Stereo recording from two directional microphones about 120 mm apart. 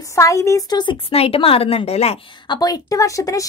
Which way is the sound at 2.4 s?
35° left (ahead or behind).